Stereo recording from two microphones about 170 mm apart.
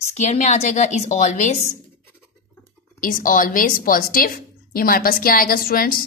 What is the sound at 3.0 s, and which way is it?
A woman's voice, 55° left (ahead or behind).